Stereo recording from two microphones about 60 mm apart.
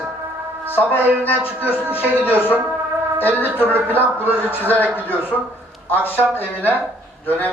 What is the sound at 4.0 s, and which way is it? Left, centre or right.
Speech, right.